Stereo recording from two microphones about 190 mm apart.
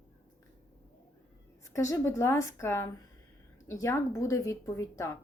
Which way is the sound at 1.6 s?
15° left (ahead or behind).